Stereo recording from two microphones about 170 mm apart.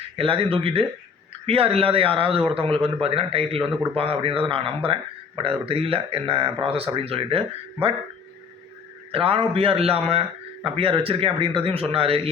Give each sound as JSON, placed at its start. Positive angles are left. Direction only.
{"t": 0.2, "sound": "a man's voice", "side_deg": -30}
{"t": 9.1, "sound": "a man's voice", "side_deg": -35}